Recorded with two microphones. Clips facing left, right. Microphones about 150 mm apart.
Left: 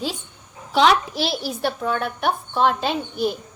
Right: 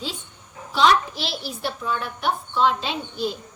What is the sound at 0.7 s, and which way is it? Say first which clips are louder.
Speech: left 2 dB; 75° left (ahead or behind).